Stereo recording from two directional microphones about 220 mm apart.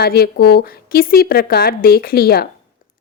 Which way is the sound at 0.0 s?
45° left (ahead or behind).